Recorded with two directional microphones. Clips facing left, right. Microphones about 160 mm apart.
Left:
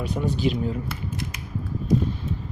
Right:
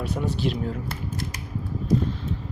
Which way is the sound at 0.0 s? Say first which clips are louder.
Left 2 dB; centre (ahead or behind).